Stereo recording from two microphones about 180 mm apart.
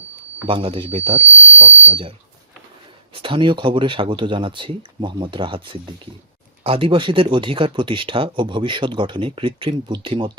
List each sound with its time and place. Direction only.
0.4 s speech: 30° right (ahead or behind)
3.2 s speech: 30° right (ahead or behind)